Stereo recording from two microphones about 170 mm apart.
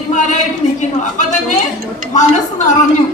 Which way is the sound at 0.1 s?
45° left (ahead or behind).